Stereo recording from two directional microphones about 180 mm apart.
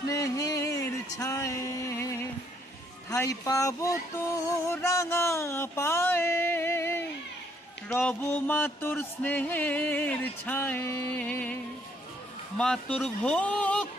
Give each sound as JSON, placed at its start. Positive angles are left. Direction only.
{"t": 0.1, "sound": "music", "side_deg": 20}
{"t": 12.5, "sound": "music", "side_deg": 5}